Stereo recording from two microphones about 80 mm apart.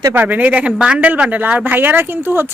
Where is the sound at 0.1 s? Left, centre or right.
Right.